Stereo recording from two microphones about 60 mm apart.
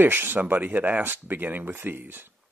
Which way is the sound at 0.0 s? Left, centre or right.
Right.